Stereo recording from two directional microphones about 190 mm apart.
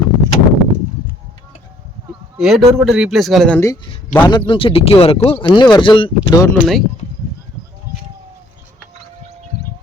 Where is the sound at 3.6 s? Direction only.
10° left (ahead or behind).